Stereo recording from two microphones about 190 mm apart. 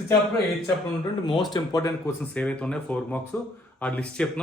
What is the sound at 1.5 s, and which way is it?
Speech, 20° left (ahead or behind).